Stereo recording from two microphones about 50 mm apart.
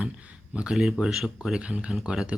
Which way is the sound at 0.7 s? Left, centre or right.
Centre.